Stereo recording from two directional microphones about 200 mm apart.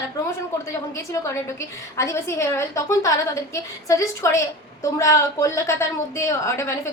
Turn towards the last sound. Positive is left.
turn(degrees=15)  # may be behind; listen again after turning